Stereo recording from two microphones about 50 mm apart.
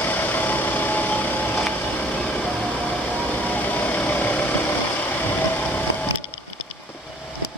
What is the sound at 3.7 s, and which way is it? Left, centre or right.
Vehicle, left.